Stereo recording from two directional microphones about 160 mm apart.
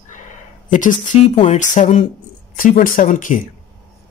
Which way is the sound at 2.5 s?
60° left (ahead or behind).